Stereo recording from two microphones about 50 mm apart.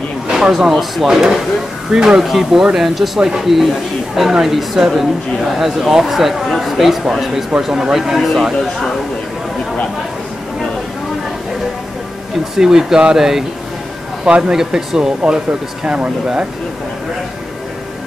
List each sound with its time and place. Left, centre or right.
0.3 s speech: centre
12.5 s speech: centre